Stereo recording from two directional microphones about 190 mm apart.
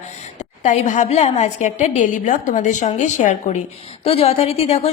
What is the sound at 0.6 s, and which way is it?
A woman's voice, 40° left (ahead or behind).